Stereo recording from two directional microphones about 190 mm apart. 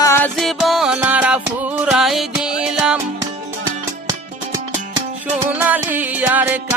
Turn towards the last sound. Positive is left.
turn(degrees=-10)  # may be behind; listen again after turning